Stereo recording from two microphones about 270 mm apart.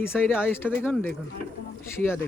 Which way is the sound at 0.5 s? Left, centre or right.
Centre.